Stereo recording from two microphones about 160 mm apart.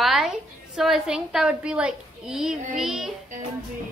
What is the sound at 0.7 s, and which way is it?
A woman's voice, 5° right (ahead or behind).